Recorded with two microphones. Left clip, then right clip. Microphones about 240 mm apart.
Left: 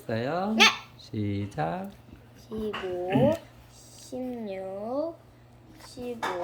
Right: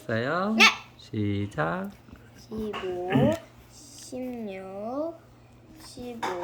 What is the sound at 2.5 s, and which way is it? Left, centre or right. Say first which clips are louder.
Speech: left 1 dB; centre.